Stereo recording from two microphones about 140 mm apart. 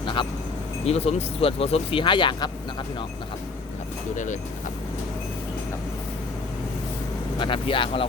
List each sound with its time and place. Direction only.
0.0 s vehicle: 35° left (ahead or behind)
0.9 s speech: 45° left (ahead or behind)
4.1 s speech: 60° left (ahead or behind)
7.3 s speech: 35° left (ahead or behind)